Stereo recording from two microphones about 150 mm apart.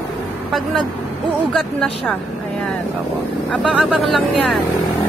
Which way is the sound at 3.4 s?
5° left (ahead or behind).